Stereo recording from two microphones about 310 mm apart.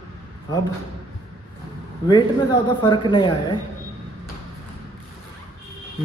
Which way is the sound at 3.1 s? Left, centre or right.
Centre.